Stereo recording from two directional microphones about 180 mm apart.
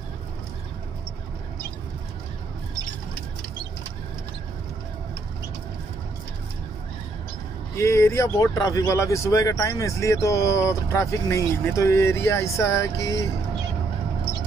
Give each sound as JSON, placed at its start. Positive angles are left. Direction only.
{"t": 7.7, "sound": "speech", "side_deg": 15}